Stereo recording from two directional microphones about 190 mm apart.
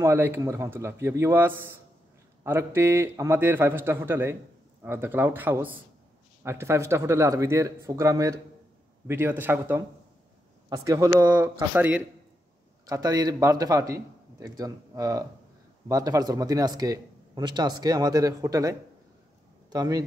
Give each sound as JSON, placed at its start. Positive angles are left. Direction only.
{"t": 0.0, "sound": "speech", "side_deg": -10}
{"t": 11.7, "sound": "a man's voice", "side_deg": -10}